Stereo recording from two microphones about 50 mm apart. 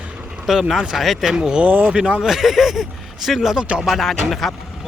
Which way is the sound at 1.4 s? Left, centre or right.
Right.